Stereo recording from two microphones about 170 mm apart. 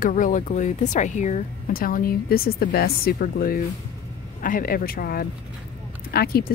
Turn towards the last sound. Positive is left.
turn(degrees=65)  # may be behind; listen again after turning